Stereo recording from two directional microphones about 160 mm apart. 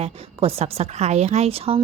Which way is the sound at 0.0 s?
40° right (ahead or behind).